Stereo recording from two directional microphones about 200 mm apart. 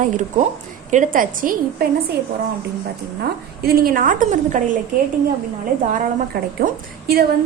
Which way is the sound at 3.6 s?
50° right (ahead or behind).